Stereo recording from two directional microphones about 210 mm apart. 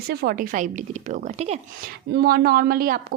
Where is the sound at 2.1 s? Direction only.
50° right (ahead or behind).